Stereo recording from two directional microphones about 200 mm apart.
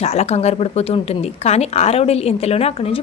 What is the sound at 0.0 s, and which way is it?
A woman's voice, 30° left (ahead or behind).